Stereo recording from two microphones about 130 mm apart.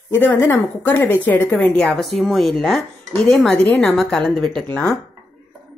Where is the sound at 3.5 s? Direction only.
15° left (ahead or behind).